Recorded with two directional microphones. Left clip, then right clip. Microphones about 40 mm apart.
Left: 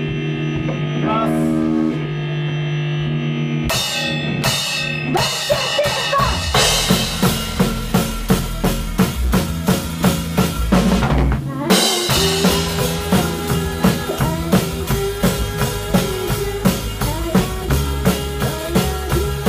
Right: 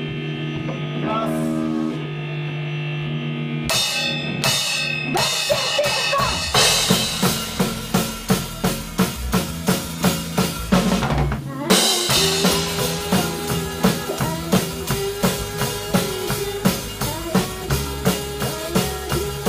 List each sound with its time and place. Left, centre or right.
1.0 s music: centre
3.6 s music: right
17.6 s music: right